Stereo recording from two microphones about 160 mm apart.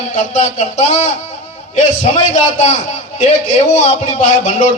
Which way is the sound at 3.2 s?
50° left (ahead or behind).